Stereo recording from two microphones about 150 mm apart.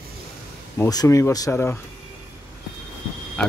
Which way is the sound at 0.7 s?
25° left (ahead or behind).